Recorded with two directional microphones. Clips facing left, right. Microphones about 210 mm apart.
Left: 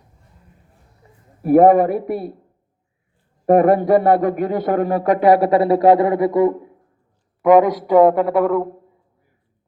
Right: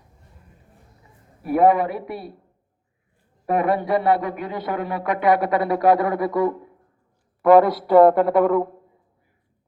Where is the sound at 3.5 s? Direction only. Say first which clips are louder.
Left 8 dB; 45° left (ahead or behind); by 8.7 s 5° left (ahead or behind).